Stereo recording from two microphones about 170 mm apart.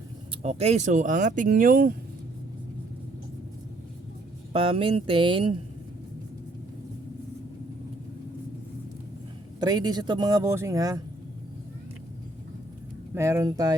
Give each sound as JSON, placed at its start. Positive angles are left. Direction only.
{"t": 0.4, "sound": "speech", "side_deg": -40}
{"t": 4.5, "sound": "speech", "side_deg": -35}
{"t": 9.6, "sound": "speech", "side_deg": -25}
{"t": 13.1, "sound": "speech", "side_deg": -15}